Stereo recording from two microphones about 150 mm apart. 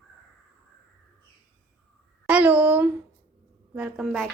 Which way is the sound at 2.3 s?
10° right (ahead or behind).